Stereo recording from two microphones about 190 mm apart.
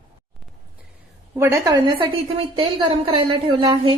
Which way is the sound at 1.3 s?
15° right (ahead or behind).